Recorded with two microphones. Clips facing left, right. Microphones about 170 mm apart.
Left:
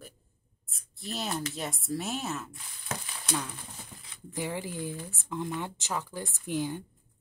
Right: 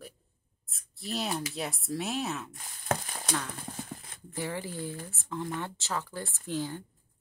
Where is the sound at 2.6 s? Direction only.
45° right (ahead or behind).